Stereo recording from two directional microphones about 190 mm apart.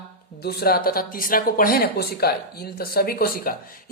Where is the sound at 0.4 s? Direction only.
55° left (ahead or behind).